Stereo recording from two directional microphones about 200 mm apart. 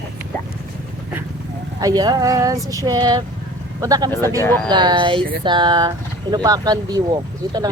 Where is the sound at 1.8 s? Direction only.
20° right (ahead or behind).